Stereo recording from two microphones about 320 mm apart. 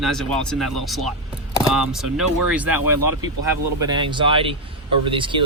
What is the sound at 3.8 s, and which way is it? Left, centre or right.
Speech, centre.